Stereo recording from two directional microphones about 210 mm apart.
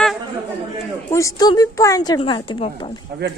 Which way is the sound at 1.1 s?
15° left (ahead or behind).